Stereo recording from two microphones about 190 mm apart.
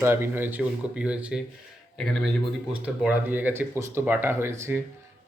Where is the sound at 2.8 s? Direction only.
5° right (ahead or behind).